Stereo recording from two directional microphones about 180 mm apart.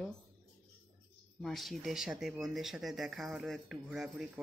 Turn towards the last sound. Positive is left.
turn(degrees=-5)  # may be behind; listen again after turning